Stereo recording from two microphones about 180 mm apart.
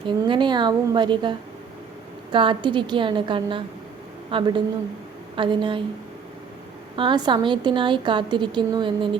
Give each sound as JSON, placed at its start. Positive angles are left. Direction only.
{"t": 0.3, "sound": "a woman's voice", "side_deg": -25}
{"t": 6.9, "sound": "a woman's voice", "side_deg": -25}